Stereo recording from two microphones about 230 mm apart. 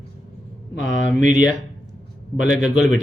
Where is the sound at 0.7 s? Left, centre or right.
Left.